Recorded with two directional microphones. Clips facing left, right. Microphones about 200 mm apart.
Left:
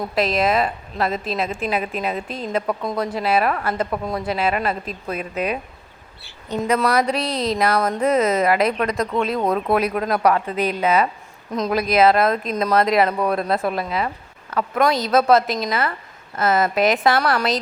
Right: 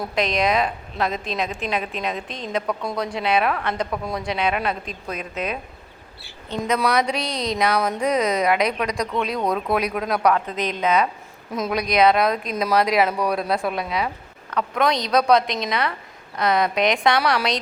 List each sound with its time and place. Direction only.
0.0 s a woman's voice: centre (ahead or behind)
6.7 s a woman's voice: 5° left (ahead or behind)